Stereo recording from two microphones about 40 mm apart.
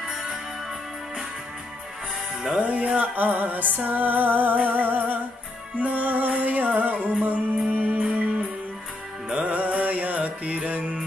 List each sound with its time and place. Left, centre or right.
2.6 s music: right
5.8 s music: right
9.3 s music: right